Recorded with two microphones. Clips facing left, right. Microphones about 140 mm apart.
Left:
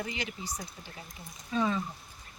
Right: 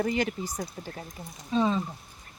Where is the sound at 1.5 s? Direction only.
25° right (ahead or behind).